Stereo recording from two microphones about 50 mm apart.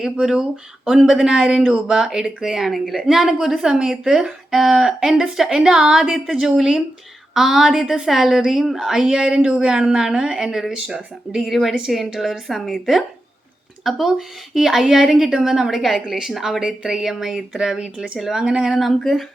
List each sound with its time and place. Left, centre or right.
0.0 s a woman's voice: centre
11.4 s a woman's voice: centre
12.6 s a woman's voice: centre
18.7 s a woman's voice: centre